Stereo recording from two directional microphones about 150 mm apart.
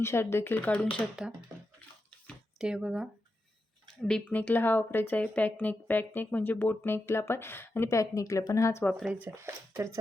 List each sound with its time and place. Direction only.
0.0 s speech: 15° left (ahead or behind)
1.2 s speech: 5° right (ahead or behind)
2.6 s speech: 5° right (ahead or behind)
4.0 s speech: 10° left (ahead or behind)
8.8 s speech: 5° left (ahead or behind)
9.0 s speech: 10° right (ahead or behind)
9.3 s speech: 20° right (ahead or behind)